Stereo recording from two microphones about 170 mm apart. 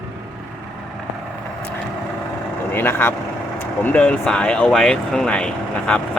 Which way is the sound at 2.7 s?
10° left (ahead or behind).